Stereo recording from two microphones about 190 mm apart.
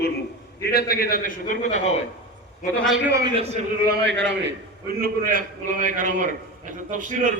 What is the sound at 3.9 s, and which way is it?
Speech, 65° right (ahead or behind).